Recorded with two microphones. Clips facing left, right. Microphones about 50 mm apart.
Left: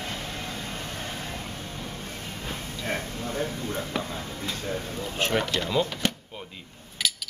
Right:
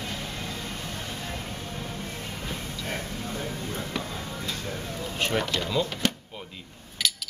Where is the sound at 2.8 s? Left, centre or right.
Left.